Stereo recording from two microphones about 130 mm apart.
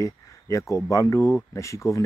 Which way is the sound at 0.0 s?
25° left (ahead or behind).